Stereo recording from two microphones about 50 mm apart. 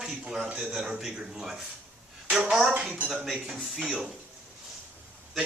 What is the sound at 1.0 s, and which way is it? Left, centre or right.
A woman's voice, centre.